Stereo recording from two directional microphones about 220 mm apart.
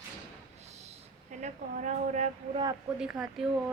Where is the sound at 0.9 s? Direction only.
30° right (ahead or behind).